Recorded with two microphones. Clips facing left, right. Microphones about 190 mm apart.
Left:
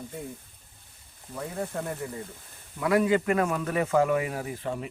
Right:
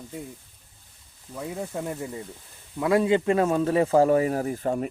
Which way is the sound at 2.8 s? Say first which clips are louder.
Right 2 dB; 25° right (ahead or behind).